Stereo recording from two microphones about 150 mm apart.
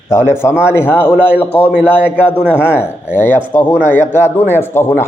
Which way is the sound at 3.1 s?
15° left (ahead or behind).